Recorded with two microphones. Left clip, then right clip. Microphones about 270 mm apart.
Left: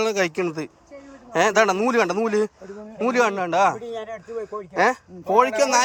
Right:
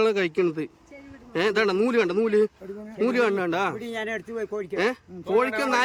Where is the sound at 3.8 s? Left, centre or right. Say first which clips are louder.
Right 1 dB; right.